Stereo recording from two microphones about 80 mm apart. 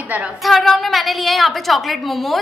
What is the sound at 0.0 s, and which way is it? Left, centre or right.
Speech, centre.